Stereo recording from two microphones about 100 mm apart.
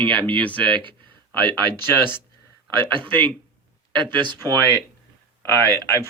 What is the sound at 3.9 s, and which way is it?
Speech, 50° right (ahead or behind).